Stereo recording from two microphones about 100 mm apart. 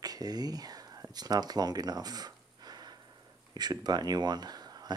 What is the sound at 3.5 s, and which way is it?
Speech, 40° right (ahead or behind).